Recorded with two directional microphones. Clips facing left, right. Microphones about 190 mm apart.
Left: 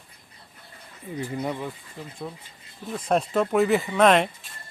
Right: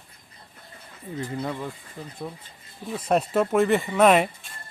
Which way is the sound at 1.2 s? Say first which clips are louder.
Left 1 dB; 15° left (ahead or behind).